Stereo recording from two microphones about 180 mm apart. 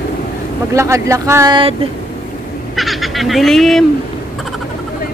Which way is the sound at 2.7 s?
Centre (ahead or behind).